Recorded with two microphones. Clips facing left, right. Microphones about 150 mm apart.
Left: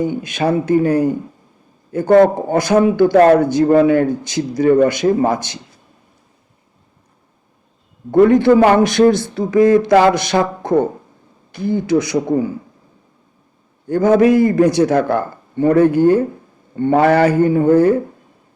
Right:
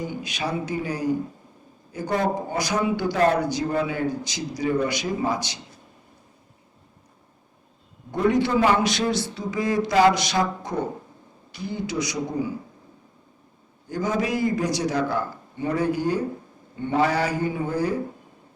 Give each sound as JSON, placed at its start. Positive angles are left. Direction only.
{"t": 0.0, "sound": "speech", "side_deg": 55}
{"t": 8.1, "sound": "speech", "side_deg": 55}
{"t": 13.8, "sound": "a man's voice", "side_deg": 55}